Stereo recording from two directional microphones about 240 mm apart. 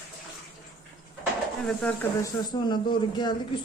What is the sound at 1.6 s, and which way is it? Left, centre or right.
Speech, centre.